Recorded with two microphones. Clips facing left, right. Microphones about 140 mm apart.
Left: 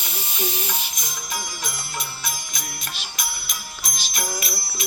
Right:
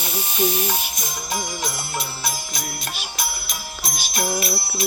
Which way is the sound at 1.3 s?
30° right (ahead or behind).